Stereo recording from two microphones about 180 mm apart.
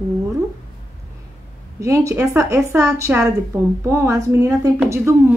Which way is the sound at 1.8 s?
15° right (ahead or behind).